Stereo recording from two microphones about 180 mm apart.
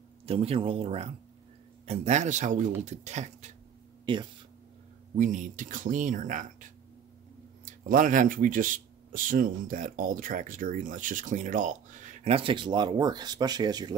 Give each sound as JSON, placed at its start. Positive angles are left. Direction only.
{"t": 0.3, "sound": "speech", "side_deg": -30}
{"t": 4.0, "sound": "speech", "side_deg": -25}
{"t": 5.1, "sound": "speech", "side_deg": -45}